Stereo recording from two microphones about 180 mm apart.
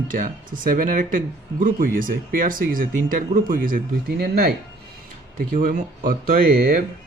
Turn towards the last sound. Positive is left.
turn(degrees=-60)  # may be behind; listen again after turning